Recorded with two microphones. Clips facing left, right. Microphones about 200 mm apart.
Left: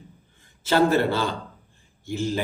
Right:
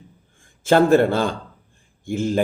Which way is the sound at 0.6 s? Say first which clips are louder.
Right 5 dB; 50° right (ahead or behind).